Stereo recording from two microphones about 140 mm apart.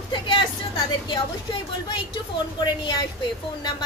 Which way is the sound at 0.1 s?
35° left (ahead or behind).